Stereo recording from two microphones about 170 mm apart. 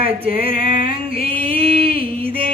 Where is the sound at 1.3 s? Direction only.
30° right (ahead or behind).